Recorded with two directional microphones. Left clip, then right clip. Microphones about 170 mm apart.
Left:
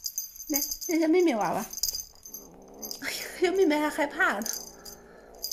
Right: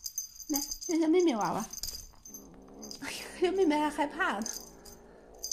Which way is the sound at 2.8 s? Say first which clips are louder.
Left 6 dB; centre (ahead or behind).